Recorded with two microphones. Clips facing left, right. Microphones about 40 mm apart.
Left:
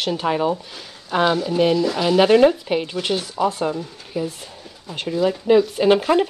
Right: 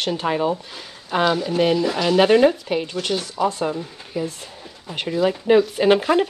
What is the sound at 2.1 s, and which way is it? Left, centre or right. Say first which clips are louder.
Speech: left 1 dB; centre.